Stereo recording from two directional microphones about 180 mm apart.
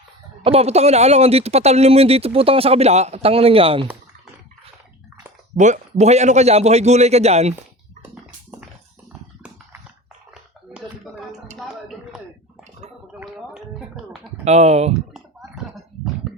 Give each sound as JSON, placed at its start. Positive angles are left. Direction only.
{"t": 0.4, "sound": "speech", "side_deg": -35}
{"t": 5.5, "sound": "speech", "side_deg": -40}
{"t": 10.8, "sound": "a sound", "side_deg": -5}
{"t": 13.2, "sound": "gargling", "side_deg": 0}
{"t": 14.4, "sound": "speech", "side_deg": -35}
{"t": 15.1, "sound": "a sound", "side_deg": 0}